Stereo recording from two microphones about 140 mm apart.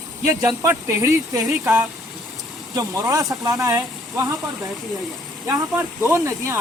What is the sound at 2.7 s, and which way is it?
Speech, 25° right (ahead or behind).